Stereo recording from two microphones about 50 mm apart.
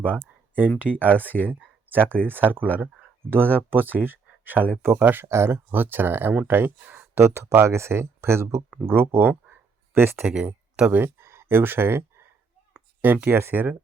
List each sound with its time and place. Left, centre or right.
0.0 s a sound: right
0.8 s speech: right
5.2 s speech: right
5.7 s speech: right
7.2 s speech: right
8.9 s speech: right
10.2 s speech: centre
11.2 s speech: right
13.3 s speech: right